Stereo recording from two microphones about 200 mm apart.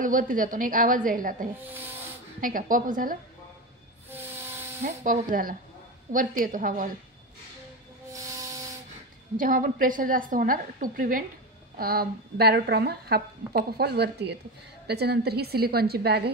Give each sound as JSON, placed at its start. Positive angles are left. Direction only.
{"t": 0.0, "sound": "speech", "side_deg": -40}
{"t": 1.6, "sound": "speech", "side_deg": -10}
{"t": 2.4, "sound": "speech", "side_deg": -40}
{"t": 4.1, "sound": "train", "side_deg": -10}
{"t": 4.8, "sound": "speech", "side_deg": -40}
{"t": 8.1, "sound": "train", "side_deg": -15}
{"t": 9.4, "sound": "speech", "side_deg": -45}